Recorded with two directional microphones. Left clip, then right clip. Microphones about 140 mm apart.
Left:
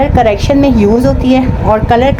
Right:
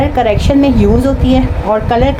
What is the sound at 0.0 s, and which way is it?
A woman's voice, 40° left (ahead or behind).